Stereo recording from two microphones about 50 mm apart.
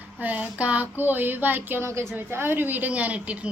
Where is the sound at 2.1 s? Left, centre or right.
Right.